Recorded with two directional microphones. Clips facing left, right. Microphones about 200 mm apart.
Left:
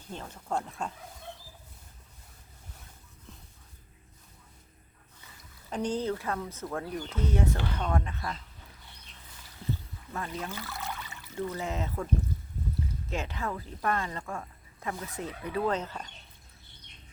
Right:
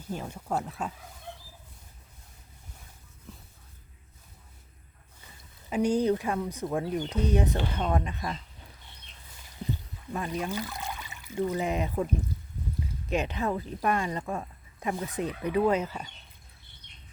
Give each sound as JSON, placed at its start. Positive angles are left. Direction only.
{"t": 0.1, "sound": "speech", "side_deg": -10}
{"t": 5.7, "sound": "speech", "side_deg": -10}
{"t": 9.6, "sound": "a sound", "side_deg": -15}
{"t": 10.1, "sound": "speech", "side_deg": -15}
{"t": 13.1, "sound": "speech", "side_deg": -20}